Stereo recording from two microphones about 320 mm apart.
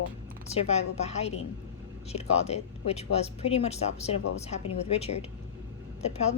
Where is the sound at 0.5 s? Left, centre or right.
Centre.